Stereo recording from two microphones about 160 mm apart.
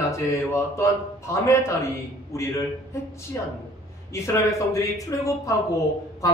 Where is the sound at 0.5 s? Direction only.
20° left (ahead or behind).